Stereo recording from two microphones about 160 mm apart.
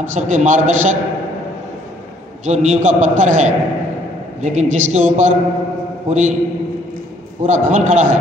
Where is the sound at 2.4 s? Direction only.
50° right (ahead or behind).